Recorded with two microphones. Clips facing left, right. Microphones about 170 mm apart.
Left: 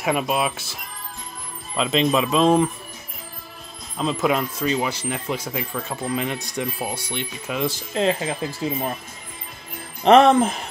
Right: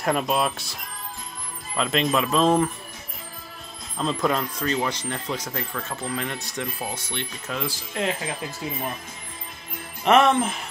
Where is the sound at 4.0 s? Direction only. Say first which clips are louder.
Left 2 dB; 5° left (ahead or behind).